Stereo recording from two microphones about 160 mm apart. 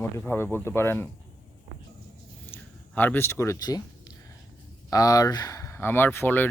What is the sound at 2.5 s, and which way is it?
Speech, 10° left (ahead or behind).